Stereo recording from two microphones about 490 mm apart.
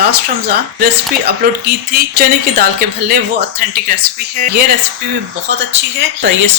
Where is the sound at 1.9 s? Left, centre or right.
Centre.